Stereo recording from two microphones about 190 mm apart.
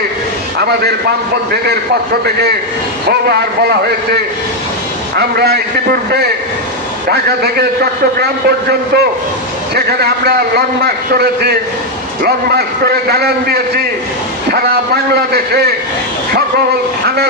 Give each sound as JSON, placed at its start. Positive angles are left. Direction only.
{"t": 0.6, "sound": "a man's voice", "side_deg": -55}
{"t": 5.1, "sound": "a man's voice", "side_deg": -60}
{"t": 7.1, "sound": "a man's voice", "side_deg": -55}
{"t": 15.3, "sound": "a man's voice", "side_deg": -55}